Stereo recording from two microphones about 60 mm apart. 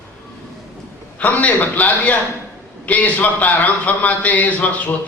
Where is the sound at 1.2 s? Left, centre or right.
Left.